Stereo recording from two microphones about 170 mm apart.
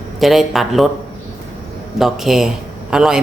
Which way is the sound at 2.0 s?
Centre (ahead or behind).